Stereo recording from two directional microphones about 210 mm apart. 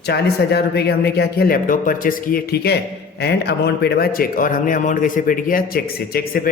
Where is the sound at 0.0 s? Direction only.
50° left (ahead or behind).